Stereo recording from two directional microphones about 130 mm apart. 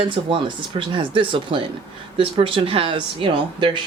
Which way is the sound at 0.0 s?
40° right (ahead or behind).